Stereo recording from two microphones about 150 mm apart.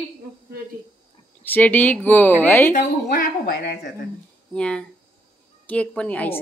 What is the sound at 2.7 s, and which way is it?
A woman's voice, 80° left.